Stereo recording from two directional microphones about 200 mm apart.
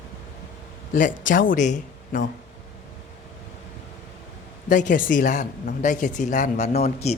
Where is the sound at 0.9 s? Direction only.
40° left (ahead or behind).